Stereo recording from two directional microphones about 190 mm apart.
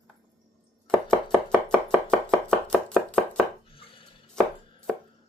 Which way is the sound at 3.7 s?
30° left (ahead or behind).